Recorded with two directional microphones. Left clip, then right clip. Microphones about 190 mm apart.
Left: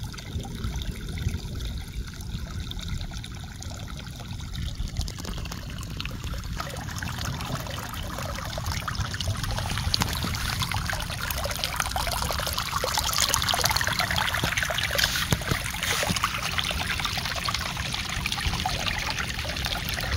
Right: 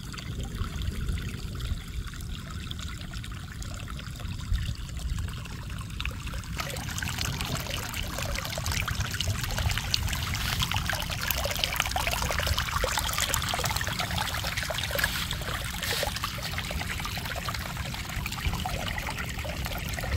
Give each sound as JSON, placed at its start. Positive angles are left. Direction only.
{"t": 6.6, "sound": "pour", "side_deg": -25}
{"t": 13.4, "sound": "trickle", "side_deg": 20}
{"t": 15.4, "sound": "boat", "side_deg": 15}
{"t": 16.6, "sound": "pour", "side_deg": 0}